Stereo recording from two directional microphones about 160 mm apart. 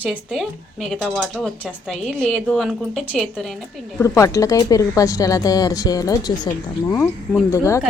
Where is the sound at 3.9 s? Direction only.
20° left (ahead or behind).